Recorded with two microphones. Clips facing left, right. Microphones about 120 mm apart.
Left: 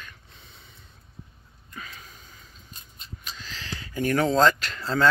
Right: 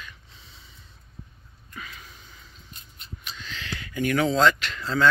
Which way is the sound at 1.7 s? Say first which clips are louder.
Even; 35° left (ahead or behind).